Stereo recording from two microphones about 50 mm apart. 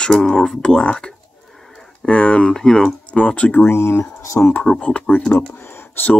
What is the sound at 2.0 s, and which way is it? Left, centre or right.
Speech, left.